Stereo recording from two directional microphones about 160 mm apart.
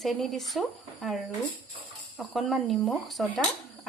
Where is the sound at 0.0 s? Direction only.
Centre (ahead or behind).